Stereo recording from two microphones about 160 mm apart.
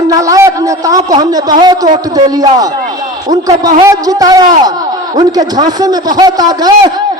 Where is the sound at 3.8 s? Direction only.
20° right (ahead or behind).